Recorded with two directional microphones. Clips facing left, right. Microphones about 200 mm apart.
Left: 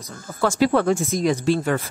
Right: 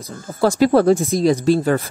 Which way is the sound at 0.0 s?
35° right (ahead or behind).